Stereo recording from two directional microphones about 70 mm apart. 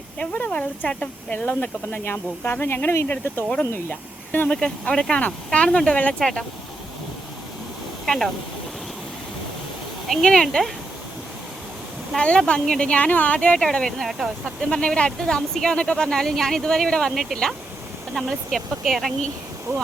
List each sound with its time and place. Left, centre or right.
0.2 s speech: left
4.4 s speech: centre
8.0 s speech: centre
10.1 s speech: centre
12.1 s speech: centre
13.6 s speech: centre
14.7 s speech: centre
17.1 s speech: centre
19.7 s speech: right